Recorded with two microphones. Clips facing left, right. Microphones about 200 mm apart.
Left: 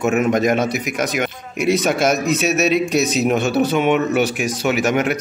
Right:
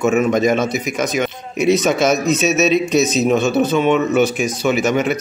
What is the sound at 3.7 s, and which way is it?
Speech, 15° left (ahead or behind).